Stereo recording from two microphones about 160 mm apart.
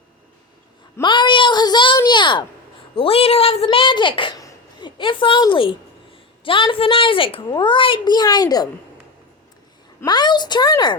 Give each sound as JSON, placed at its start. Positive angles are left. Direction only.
{"t": 1.0, "sound": "child singing", "side_deg": 30}
{"t": 2.0, "sound": "a sound", "side_deg": 30}
{"t": 2.9, "sound": "a child's voice", "side_deg": 35}
{"t": 10.1, "sound": "speech", "side_deg": 25}